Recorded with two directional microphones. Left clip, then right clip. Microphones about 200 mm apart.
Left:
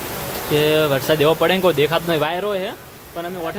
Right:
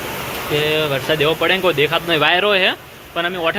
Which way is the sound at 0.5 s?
35° left (ahead or behind).